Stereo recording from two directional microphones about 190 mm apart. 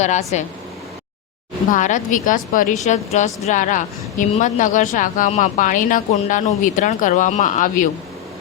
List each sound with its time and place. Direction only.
0.0 s a woman's voice: 35° left (ahead or behind)
1.7 s a woman's voice: 40° left (ahead or behind)